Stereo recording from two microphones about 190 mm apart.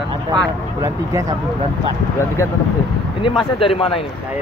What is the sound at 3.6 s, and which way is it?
Speech, 30° left (ahead or behind).